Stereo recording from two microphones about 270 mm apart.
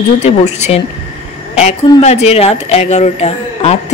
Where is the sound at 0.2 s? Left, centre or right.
Left.